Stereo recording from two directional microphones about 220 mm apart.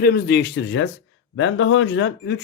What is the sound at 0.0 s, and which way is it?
Speech, 45° left (ahead or behind).